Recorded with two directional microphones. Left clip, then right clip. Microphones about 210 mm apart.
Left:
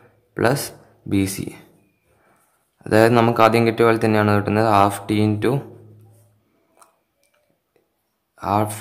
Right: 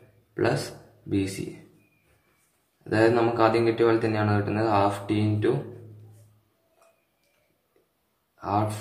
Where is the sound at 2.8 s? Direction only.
45° left (ahead or behind).